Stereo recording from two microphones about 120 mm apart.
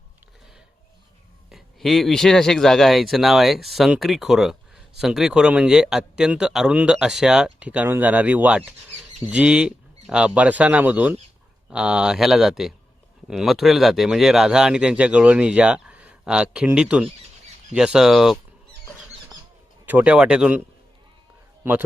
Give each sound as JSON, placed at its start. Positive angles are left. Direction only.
{"t": 1.5, "sound": "speech", "side_deg": 0}
{"t": 19.8, "sound": "speech", "side_deg": -15}
{"t": 21.6, "sound": "a man's voice", "side_deg": -15}